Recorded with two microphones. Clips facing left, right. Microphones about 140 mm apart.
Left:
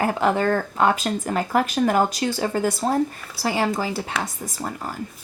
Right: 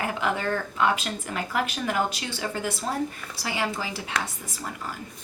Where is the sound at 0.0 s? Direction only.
40° left (ahead or behind).